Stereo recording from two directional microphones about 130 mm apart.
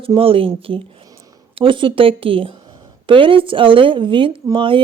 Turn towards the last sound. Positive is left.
turn(degrees=-40)  # may be behind; listen again after turning